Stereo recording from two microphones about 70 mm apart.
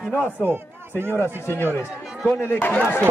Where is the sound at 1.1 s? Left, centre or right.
Left.